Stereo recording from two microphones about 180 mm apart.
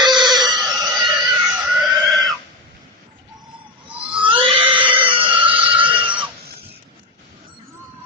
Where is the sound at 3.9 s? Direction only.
5° right (ahead or behind).